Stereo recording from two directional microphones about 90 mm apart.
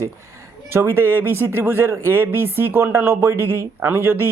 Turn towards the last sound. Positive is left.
turn(degrees=-25)  # may be behind; listen again after turning